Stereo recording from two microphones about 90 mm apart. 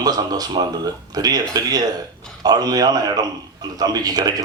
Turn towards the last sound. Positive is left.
turn(degrees=-45)  # may be behind; listen again after turning